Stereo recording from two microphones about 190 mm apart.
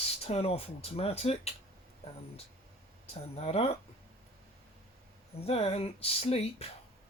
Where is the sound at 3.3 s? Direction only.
30° left (ahead or behind).